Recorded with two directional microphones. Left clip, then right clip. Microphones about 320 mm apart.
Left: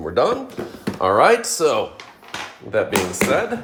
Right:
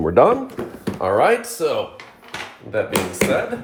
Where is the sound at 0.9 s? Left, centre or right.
Centre.